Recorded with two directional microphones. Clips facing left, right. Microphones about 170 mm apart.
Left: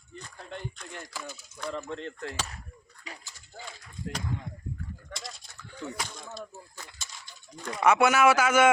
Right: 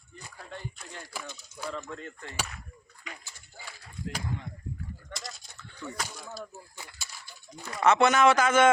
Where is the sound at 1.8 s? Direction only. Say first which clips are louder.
Left 3 dB; 30° left (ahead or behind).